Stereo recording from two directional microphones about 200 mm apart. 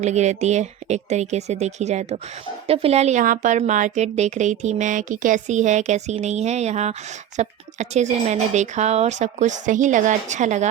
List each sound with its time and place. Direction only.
0.0 s a woman's voice: 35° right (ahead or behind)